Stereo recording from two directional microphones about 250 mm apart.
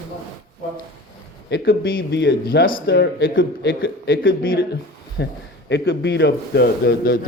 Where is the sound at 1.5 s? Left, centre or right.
Left.